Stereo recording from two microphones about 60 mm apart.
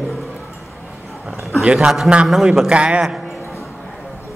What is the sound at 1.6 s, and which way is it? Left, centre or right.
A man's voice, centre.